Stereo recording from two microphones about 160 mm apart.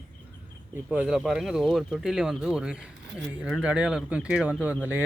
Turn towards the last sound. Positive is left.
turn(degrees=-10)  # may be behind; listen again after turning